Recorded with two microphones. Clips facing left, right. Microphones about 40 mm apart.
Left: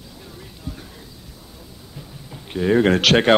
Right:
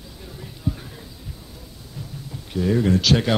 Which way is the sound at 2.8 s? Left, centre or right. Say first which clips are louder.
Left 4 dB; left.